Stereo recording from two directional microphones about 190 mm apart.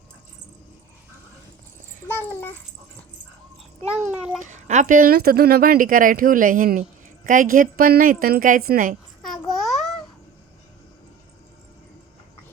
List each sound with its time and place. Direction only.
2.0 s a child's voice: 10° left (ahead or behind)
4.4 s speech: 40° right (ahead or behind)
9.5 s babbling: centre (ahead or behind)